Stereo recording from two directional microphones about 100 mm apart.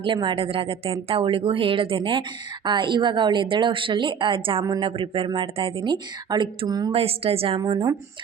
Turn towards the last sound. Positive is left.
turn(degrees=-60)  # may be behind; listen again after turning